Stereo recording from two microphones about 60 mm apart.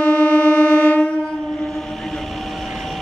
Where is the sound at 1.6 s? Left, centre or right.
Centre.